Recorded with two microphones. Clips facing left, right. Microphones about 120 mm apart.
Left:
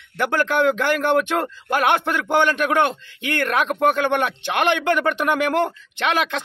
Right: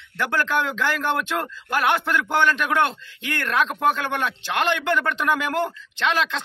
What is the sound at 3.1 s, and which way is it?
A man's voice, 55° left (ahead or behind).